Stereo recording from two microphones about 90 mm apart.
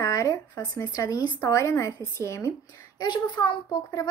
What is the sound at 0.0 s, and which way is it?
Speech, 35° left (ahead or behind).